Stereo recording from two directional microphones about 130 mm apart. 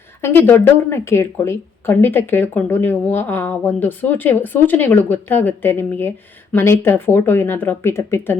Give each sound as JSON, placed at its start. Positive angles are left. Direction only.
{"t": 0.2, "sound": "speech", "side_deg": 20}